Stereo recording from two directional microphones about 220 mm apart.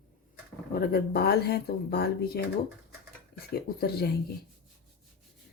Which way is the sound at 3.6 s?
45° left (ahead or behind).